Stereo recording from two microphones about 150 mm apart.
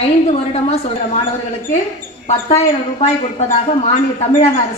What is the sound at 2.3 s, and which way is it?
A woman's voice, 45° left (ahead or behind).